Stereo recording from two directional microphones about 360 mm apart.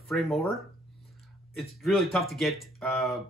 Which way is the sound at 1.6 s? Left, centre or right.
Centre.